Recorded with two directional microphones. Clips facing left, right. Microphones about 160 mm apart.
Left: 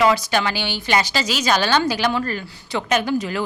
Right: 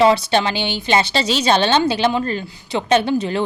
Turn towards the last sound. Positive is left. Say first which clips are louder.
# right 4 dB
turn(degrees=-25)  # may be behind; listen again after turning